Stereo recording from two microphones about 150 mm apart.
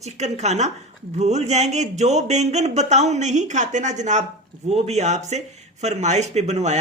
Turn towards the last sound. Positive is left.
turn(degrees=-50)  # may be behind; listen again after turning